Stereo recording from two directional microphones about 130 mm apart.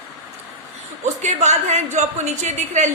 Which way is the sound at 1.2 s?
65° right (ahead or behind).